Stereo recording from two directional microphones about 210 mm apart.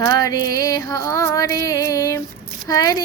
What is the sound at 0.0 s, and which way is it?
Speech, 15° left (ahead or behind).